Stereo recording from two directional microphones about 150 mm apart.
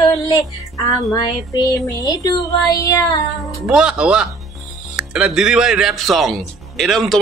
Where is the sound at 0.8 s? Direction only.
25° left (ahead or behind).